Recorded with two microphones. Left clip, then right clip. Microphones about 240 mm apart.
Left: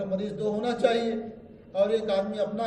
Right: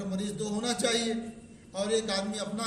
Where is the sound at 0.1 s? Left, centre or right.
Right.